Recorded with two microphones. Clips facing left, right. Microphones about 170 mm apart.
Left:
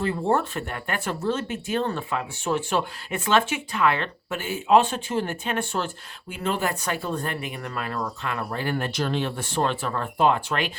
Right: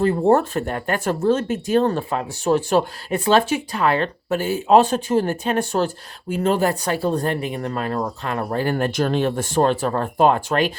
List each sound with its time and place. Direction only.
0.0 s speech: 40° right (ahead or behind)